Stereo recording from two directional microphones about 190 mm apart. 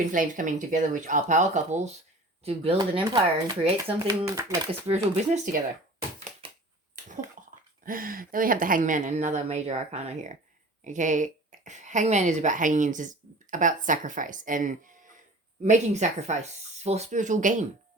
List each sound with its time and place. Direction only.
0.1 s a woman's voice: 45° right (ahead or behind); by 3.9 s 25° right (ahead or behind)
4.3 s speech: 15° right (ahead or behind)
4.9 s a woman's voice: 35° right (ahead or behind)
7.9 s a woman's voice: 50° right (ahead or behind)